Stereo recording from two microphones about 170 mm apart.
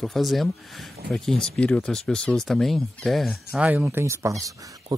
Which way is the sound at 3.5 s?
10° right (ahead or behind).